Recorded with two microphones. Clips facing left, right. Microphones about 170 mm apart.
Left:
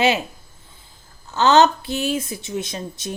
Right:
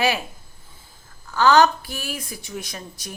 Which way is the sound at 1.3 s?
25° left (ahead or behind).